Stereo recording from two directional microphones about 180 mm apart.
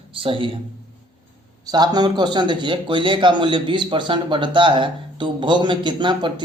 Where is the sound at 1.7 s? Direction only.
25° right (ahead or behind).